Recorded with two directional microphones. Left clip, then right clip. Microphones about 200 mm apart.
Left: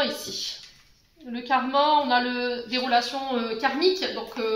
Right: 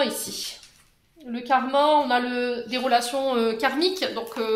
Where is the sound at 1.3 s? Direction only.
55° right (ahead or behind).